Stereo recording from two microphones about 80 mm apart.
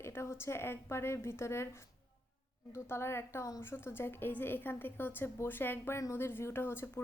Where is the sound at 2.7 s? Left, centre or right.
Left.